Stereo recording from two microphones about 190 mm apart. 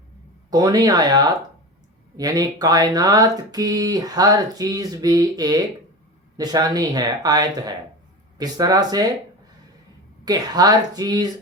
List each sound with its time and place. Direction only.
0.5 s speech: 20° right (ahead or behind)
10.2 s speech: 20° right (ahead or behind)